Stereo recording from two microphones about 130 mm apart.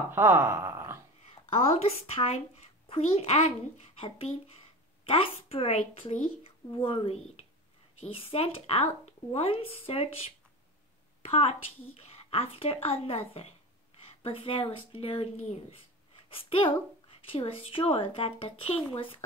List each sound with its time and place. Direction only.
0.1 s speech: 15° right (ahead or behind)
1.3 s speech: 50° left (ahead or behind)